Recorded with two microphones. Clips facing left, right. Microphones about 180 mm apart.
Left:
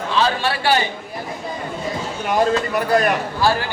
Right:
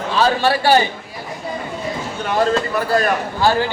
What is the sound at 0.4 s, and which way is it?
Speech, 40° right (ahead or behind).